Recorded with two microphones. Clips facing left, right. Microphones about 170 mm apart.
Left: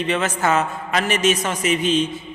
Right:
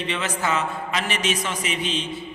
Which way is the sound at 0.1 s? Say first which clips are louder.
Left 5 dB; 45° left (ahead or behind).